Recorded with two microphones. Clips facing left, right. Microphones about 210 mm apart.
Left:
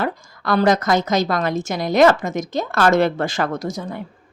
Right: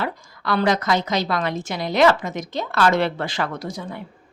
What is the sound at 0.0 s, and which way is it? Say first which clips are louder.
A woman's voice: left 3 dB; 45° left (ahead or behind).